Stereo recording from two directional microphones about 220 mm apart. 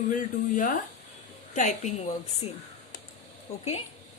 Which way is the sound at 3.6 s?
25° left (ahead or behind).